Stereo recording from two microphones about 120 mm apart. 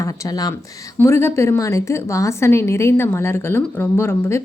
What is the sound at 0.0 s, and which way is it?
Speech, 30° left (ahead or behind).